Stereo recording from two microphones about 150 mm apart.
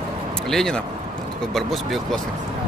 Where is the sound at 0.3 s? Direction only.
5° left (ahead or behind).